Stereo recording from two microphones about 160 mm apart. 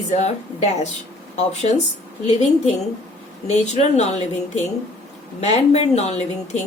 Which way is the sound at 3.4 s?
45° left (ahead or behind).